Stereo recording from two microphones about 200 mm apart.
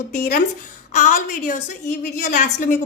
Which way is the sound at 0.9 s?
40° left (ahead or behind).